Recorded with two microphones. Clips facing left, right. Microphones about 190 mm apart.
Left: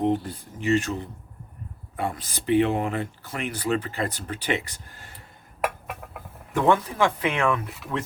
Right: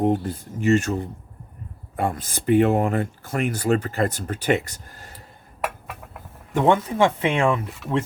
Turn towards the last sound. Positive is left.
turn(degrees=-30)  # may be behind; listen again after turning